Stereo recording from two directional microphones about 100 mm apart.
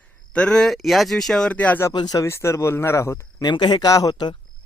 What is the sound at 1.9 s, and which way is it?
Speech, 45° left (ahead or behind).